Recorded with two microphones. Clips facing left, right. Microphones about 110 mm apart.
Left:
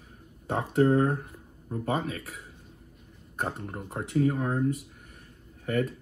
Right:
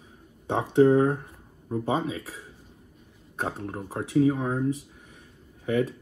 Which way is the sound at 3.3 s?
Centre (ahead or behind).